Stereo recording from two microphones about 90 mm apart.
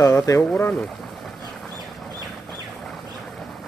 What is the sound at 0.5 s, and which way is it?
Speech, 20° left (ahead or behind).